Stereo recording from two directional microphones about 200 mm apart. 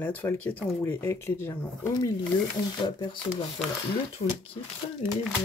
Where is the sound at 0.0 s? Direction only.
10° left (ahead or behind).